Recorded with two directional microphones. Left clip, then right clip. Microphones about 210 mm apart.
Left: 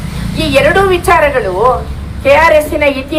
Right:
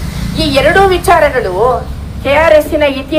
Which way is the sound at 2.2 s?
50° right (ahead or behind).